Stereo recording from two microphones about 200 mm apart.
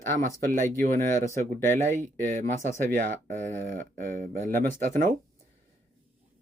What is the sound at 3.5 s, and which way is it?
Speech, 10° left (ahead or behind).